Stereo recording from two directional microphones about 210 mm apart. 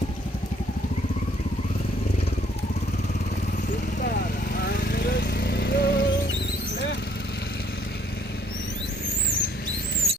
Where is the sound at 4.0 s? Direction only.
45° left (ahead or behind).